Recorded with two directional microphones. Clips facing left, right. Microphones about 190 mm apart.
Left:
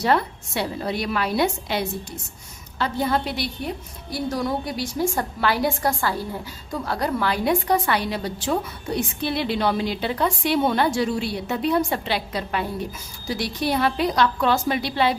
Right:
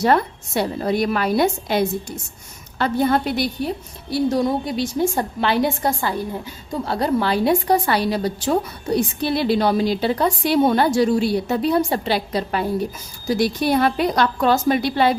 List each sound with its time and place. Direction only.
0.0 s a woman's voice: 45° right (ahead or behind)
4.1 s a woman's voice: 25° right (ahead or behind); by 15.1 s 45° right (ahead or behind)